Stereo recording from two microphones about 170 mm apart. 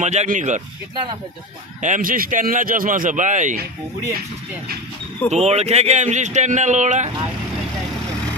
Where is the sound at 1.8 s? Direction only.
50° right (ahead or behind).